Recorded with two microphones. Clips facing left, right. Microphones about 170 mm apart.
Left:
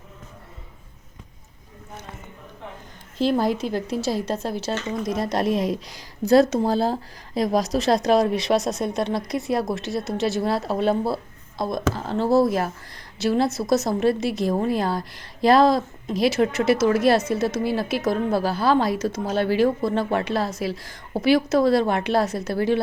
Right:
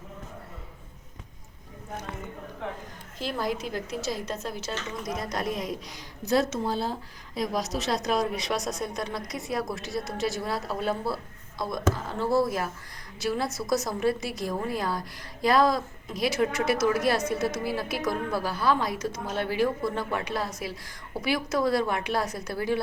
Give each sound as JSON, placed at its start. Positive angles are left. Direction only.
{"t": 3.2, "sound": "speech", "side_deg": 30}
{"t": 5.5, "sound": "speech", "side_deg": 75}
{"t": 6.4, "sound": "a woman's voice", "side_deg": 35}